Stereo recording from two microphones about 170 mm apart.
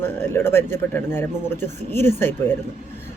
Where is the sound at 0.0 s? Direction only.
10° left (ahead or behind).